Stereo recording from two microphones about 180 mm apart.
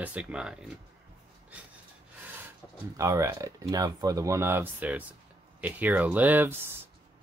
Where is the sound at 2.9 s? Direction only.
15° right (ahead or behind).